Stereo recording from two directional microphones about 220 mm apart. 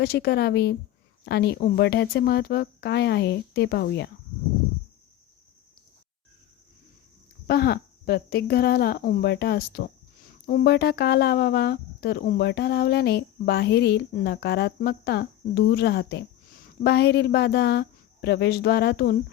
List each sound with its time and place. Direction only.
0.0 s speech: 45° left (ahead or behind)
7.4 s speech: 45° left (ahead or behind)